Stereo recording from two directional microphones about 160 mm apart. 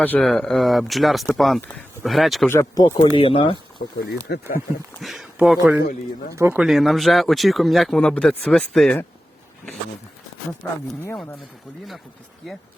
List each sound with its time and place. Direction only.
0.0 s speech: 5° left (ahead or behind)
2.5 s speech: 20° left (ahead or behind)
3.2 s speech: 35° left (ahead or behind)
4.0 s speech: 80° left
4.9 s speech: centre (ahead or behind)
6.3 s speech: 15° right (ahead or behind)
6.6 s speech: centre (ahead or behind)
10.6 s speech: 15° left (ahead or behind)